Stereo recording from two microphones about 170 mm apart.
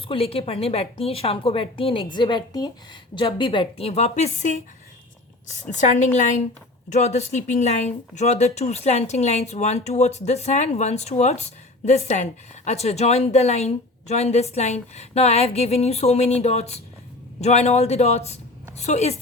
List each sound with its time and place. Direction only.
0.1 s a woman's voice: 35° left (ahead or behind)